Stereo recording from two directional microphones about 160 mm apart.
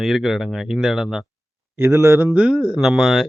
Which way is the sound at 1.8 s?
15° right (ahead or behind).